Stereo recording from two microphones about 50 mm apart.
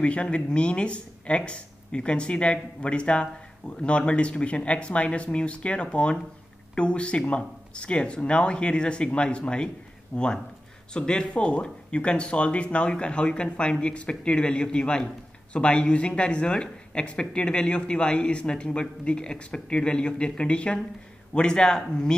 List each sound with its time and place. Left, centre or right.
0.0 s speech: left